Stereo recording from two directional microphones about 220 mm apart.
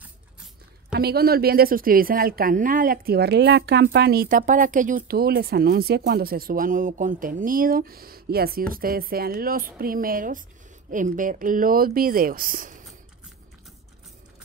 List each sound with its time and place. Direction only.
0.9 s a woman's voice: 45° right (ahead or behind)